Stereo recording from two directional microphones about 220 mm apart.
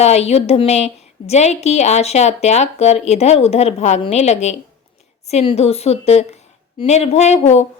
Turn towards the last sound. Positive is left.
turn(degrees=30)  # may be behind; listen again after turning